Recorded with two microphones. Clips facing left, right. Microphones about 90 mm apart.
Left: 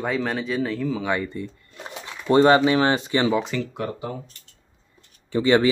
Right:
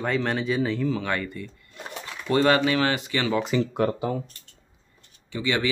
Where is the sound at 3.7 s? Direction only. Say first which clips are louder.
Right 5 dB; 60° right (ahead or behind).